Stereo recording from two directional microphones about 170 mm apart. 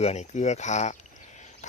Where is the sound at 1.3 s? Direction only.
45° left (ahead or behind).